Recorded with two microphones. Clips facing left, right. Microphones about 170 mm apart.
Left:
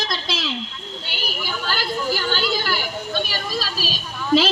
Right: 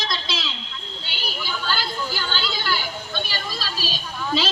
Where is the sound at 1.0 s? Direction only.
45° left (ahead or behind).